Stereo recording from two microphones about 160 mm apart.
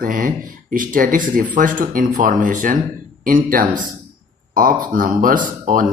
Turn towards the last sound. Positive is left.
turn(degrees=-60)  # may be behind; listen again after turning